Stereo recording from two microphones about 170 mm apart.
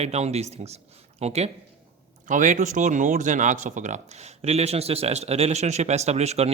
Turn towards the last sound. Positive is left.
turn(degrees=-40)  # may be behind; listen again after turning